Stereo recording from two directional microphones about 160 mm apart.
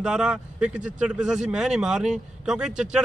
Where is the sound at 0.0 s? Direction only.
5° right (ahead or behind).